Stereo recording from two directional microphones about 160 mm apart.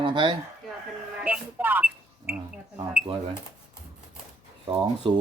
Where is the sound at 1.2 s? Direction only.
10° right (ahead or behind).